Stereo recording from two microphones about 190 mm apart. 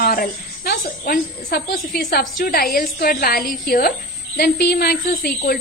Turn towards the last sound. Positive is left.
turn(degrees=55)  # may be behind; listen again after turning